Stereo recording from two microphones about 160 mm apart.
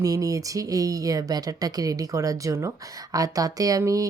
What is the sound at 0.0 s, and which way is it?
Speech, 20° right (ahead or behind).